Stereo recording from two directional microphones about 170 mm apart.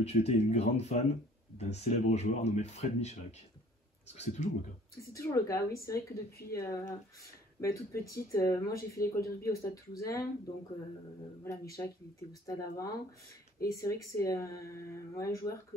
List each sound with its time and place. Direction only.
0.0 s speech: 40° left (ahead or behind)
4.9 s speech: 20° left (ahead or behind)
11.4 s speech: 20° left (ahead or behind)